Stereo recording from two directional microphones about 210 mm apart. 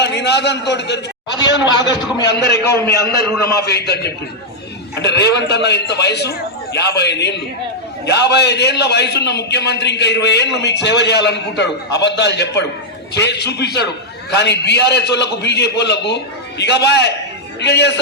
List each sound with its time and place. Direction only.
0.0 s a man's voice: 55° left (ahead or behind)
1.9 s a man's voice: 20° left (ahead or behind)
2.2 s a man's voice: 50° left (ahead or behind)